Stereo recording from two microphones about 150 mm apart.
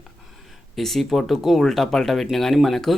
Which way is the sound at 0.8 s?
Centre (ahead or behind).